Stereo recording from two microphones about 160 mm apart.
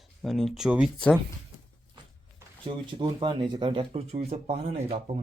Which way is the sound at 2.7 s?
35° right (ahead or behind).